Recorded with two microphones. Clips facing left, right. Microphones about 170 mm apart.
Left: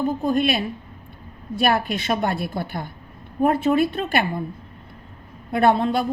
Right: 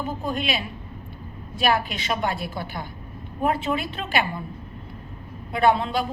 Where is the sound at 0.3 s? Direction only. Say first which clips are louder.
Left 6 dB; 50° left (ahead or behind).